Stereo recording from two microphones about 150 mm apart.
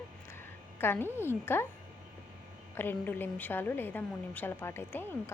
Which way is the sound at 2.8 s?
15° left (ahead or behind).